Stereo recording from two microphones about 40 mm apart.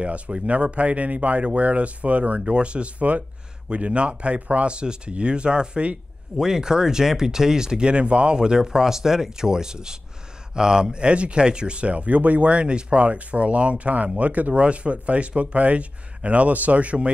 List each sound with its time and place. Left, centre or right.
0.0 s speech: right
2.4 s speech: right
6.3 s speech: centre
8.4 s speech: centre; by 14.5 s right
14.5 s speech: right